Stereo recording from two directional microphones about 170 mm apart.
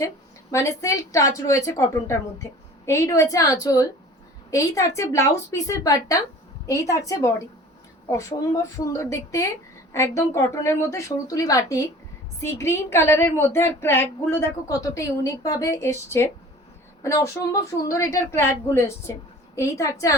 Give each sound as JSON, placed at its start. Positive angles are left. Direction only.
{"t": 0.5, "sound": "a woman's voice", "side_deg": 15}